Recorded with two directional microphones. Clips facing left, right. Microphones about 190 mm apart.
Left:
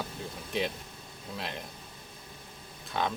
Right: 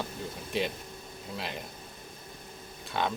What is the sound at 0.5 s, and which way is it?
Speech, centre (ahead or behind).